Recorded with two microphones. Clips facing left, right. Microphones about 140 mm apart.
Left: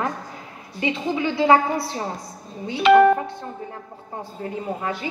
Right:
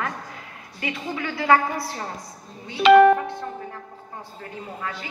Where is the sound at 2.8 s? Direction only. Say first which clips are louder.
Right 1 dB; 90° right.